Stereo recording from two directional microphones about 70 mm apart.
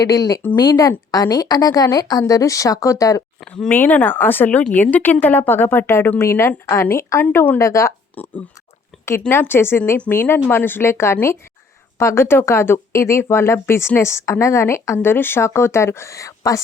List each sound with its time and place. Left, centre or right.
0.0 s a woman's voice: left
3.7 s speech: left
7.3 s speech: left
7.6 s speech: left
8.1 s speech: left
9.3 s speech: left